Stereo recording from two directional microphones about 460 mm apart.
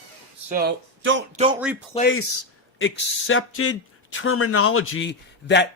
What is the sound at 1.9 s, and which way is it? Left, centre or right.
A man's voice, centre.